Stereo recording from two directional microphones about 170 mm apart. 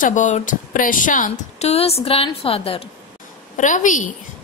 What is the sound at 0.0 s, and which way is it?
Speech, 45° left (ahead or behind).